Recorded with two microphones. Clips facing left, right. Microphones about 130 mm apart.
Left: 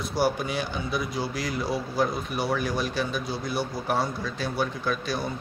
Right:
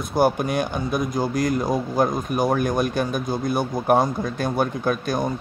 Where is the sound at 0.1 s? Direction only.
50° right (ahead or behind).